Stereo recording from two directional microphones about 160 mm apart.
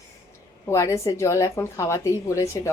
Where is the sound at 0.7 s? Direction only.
20° left (ahead or behind).